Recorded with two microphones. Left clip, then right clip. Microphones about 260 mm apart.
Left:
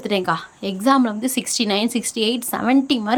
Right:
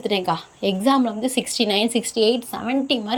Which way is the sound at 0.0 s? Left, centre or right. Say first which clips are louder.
Left 1 dB; centre.